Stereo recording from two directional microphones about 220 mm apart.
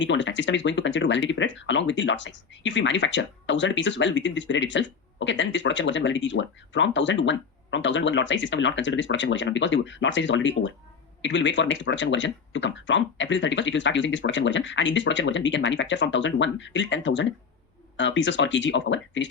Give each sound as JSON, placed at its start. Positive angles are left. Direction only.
{"t": 0.0, "sound": "speech", "side_deg": 55}